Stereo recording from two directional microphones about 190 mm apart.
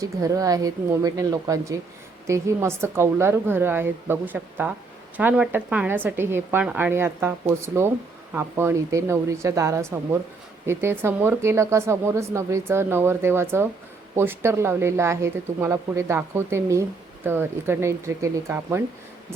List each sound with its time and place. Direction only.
0.0 s a woman's voice: 15° right (ahead or behind)